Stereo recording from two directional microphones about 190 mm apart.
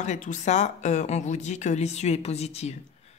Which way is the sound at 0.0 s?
40° left (ahead or behind).